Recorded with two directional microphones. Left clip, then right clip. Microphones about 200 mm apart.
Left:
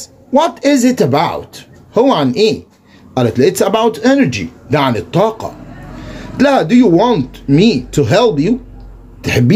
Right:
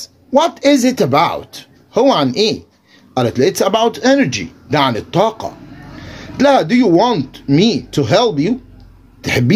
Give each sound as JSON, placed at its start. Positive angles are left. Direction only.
{"t": 0.0, "sound": "speech", "side_deg": -25}